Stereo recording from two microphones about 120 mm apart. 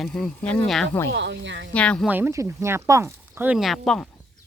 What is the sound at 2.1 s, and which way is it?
Speech, 20° right (ahead or behind).